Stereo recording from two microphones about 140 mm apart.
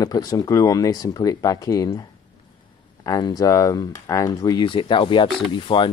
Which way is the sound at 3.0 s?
25° left (ahead or behind).